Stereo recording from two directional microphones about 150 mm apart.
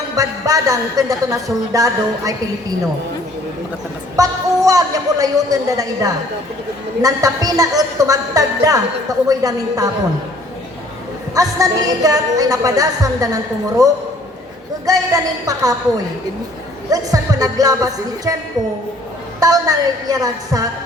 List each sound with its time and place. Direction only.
0.2 s a woman's voice: 25° right (ahead or behind)
4.2 s a woman's voice: 25° right (ahead or behind)
11.3 s a woman's voice: 25° right (ahead or behind)
19.4 s a woman's voice: 25° right (ahead or behind)